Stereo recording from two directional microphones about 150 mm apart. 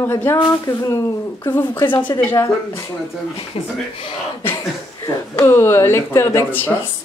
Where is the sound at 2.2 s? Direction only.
20° left (ahead or behind).